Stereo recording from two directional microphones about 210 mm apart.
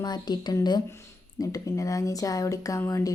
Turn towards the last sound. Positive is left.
turn(degrees=15)  # may be behind; listen again after turning